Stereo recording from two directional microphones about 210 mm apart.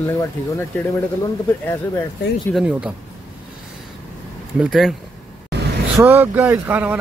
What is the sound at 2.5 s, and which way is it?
Speech, 5° right (ahead or behind).